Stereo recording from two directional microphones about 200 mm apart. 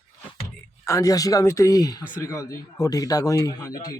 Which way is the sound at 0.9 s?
15° left (ahead or behind).